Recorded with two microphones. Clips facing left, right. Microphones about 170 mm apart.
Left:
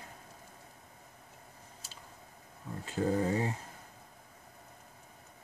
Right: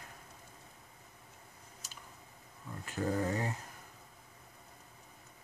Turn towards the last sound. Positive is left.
turn(degrees=25)  # may be behind; listen again after turning